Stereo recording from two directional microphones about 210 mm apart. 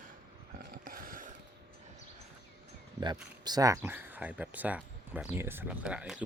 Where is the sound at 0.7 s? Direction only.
40° right (ahead or behind).